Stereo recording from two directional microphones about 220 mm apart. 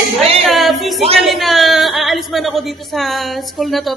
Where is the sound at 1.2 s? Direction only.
Centre (ahead or behind).